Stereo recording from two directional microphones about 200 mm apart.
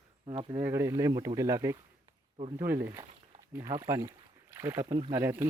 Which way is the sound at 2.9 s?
25° right (ahead or behind).